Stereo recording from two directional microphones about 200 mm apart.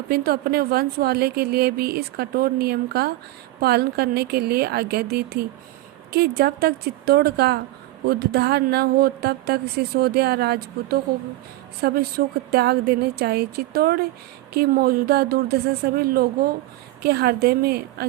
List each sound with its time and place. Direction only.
0.1 s a woman's voice: 50° right (ahead or behind)